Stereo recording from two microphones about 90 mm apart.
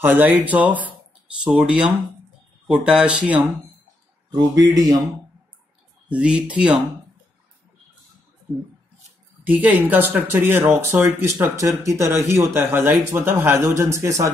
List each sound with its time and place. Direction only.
0.0 s speech: 20° right (ahead or behind)
4.3 s speech: 50° right (ahead or behind)
6.0 s speech: 10° right (ahead or behind)
9.4 s speech: 20° right (ahead or behind); by 14.3 s 35° right (ahead or behind)